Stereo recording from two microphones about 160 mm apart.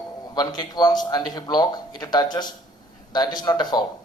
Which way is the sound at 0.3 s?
25° left (ahead or behind).